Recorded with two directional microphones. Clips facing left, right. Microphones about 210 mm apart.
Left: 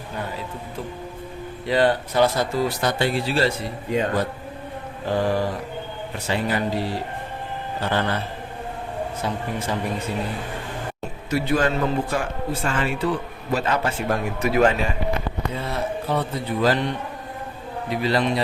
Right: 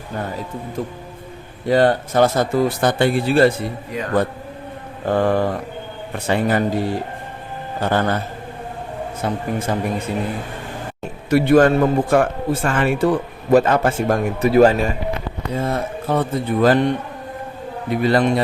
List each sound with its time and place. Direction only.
1.6 s a man's voice: 45° right (ahead or behind)
3.8 s a man's voice: 25° left (ahead or behind)
5.0 s mantra: 55° right (ahead or behind)
6.1 s a man's voice: 55° right (ahead or behind)
9.2 s a man's voice: 50° right (ahead or behind)
11.3 s a man's voice: 55° right (ahead or behind)
14.4 s a man's voice: 35° right (ahead or behind)